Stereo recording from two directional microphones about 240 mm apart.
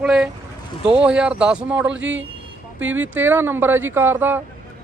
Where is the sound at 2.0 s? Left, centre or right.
Right.